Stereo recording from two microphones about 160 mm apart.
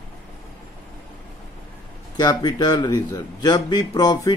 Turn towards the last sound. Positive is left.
turn(degrees=25)  # may be behind; listen again after turning